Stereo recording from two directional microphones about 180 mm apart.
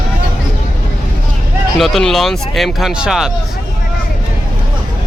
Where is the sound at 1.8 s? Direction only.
Centre (ahead or behind).